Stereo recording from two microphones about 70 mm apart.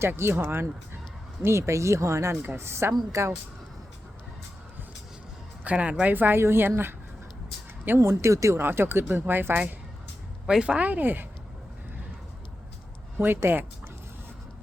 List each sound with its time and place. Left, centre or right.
0.0 s speech: right
1.5 s speech: right
2.3 s a woman's voice: right
2.6 s speech: right
2.9 s speech: right
5.6 s a woman's voice: centre
7.9 s speech: right
8.5 s speech: right
10.4 s a woman's voice: centre; by 11.3 s right
13.1 s speech: right